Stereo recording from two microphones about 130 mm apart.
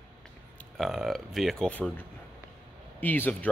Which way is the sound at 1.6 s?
10° left (ahead or behind).